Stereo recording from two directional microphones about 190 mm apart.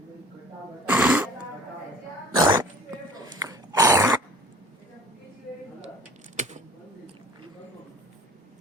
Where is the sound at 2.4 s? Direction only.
20° right (ahead or behind).